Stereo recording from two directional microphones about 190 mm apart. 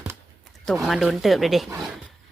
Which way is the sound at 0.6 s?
Centre (ahead or behind).